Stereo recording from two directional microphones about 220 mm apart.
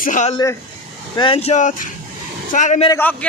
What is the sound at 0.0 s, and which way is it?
Speech, 35° left (ahead or behind).